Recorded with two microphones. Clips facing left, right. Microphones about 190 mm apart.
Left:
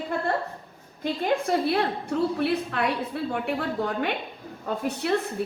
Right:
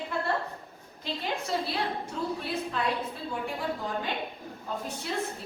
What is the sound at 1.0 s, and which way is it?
A woman's voice, 55° left (ahead or behind).